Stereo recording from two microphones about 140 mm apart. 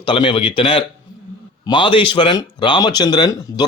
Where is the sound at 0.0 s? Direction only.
35° left (ahead or behind).